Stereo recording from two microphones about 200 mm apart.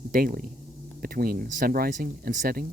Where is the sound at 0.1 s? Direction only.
45° right (ahead or behind).